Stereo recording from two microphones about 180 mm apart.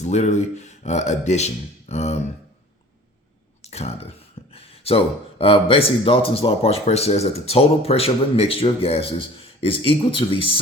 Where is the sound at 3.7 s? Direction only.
35° left (ahead or behind).